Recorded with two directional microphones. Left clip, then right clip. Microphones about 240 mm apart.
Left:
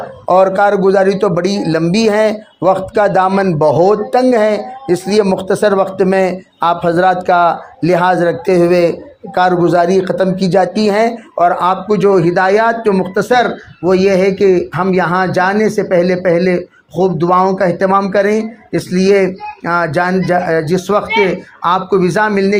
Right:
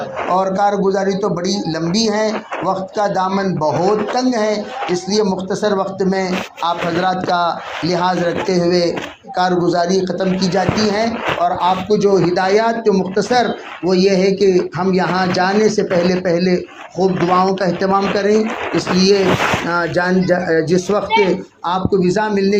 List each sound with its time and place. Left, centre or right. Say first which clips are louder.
0.3 s speech: left 6 dB; left